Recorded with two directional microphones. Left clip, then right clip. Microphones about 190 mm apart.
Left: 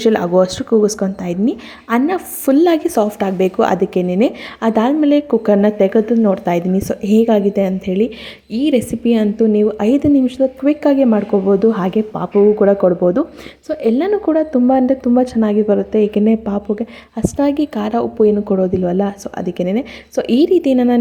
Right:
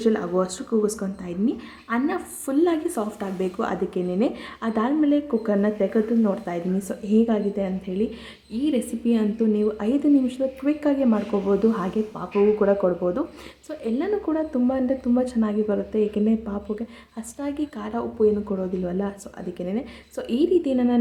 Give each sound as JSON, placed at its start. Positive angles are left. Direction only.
{"t": 0.0, "sound": "speech", "side_deg": 35}